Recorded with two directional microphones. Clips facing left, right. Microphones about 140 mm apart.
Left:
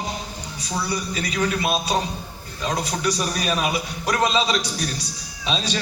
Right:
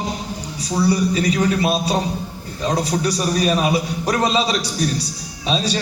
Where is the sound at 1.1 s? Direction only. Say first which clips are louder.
Right 6 dB; 35° right (ahead or behind).